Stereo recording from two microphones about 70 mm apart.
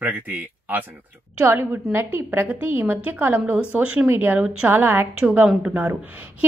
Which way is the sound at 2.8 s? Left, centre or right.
Right.